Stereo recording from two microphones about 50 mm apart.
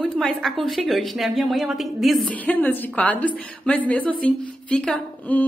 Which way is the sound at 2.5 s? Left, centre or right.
Left.